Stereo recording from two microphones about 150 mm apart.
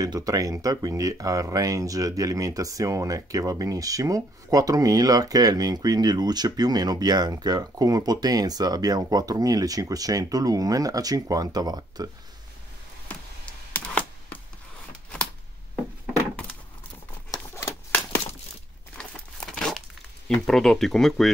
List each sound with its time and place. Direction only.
0.0 s speech: 25° right (ahead or behind)
13.7 s chopping: 10° left (ahead or behind)
17.3 s a sound: 15° left (ahead or behind)
18.9 s crumpling: 5° left (ahead or behind)
20.3 s speech: 5° left (ahead or behind)